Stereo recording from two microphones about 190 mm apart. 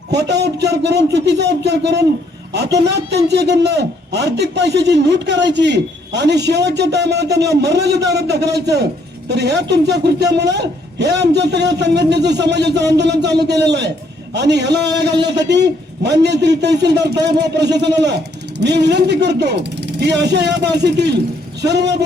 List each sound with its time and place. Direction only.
0.1 s a man's voice: 60° right (ahead or behind)